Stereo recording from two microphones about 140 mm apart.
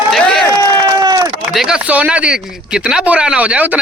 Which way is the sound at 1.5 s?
5° right (ahead or behind).